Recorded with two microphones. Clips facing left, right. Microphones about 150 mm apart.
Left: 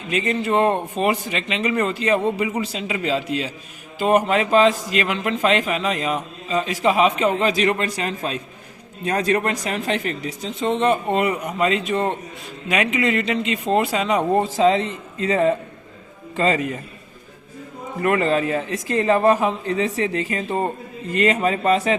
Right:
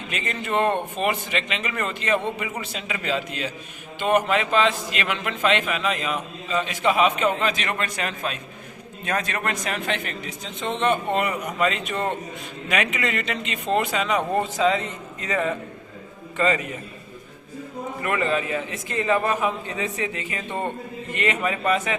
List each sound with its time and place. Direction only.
0.1 s a man's voice: 35° left (ahead or behind)
18.0 s a man's voice: 35° left (ahead or behind)